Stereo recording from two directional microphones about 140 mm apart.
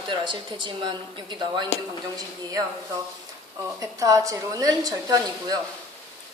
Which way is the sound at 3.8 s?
25° right (ahead or behind).